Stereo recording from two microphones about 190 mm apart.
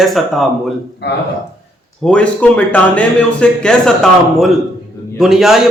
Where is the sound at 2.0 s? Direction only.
5° left (ahead or behind).